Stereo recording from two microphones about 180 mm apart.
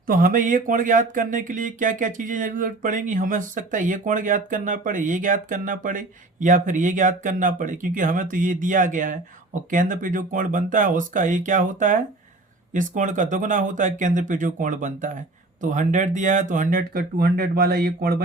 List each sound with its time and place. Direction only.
0.1 s speech: 50° right (ahead or behind)